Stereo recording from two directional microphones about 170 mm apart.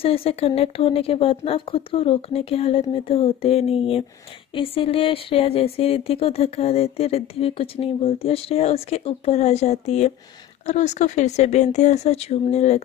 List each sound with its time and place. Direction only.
0.0 s speech: 35° left (ahead or behind)